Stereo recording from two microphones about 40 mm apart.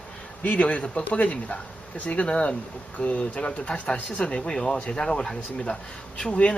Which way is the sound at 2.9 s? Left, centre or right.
Left.